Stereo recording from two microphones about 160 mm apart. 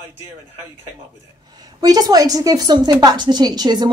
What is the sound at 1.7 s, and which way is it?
A woman's voice, 25° right (ahead or behind).